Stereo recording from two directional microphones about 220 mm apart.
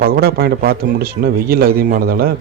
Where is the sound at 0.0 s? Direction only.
45° right (ahead or behind).